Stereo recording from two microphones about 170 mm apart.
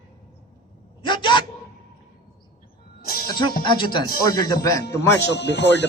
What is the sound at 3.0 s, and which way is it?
Music, 60° left (ahead or behind).